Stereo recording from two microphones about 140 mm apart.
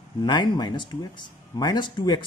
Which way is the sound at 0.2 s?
30° left (ahead or behind).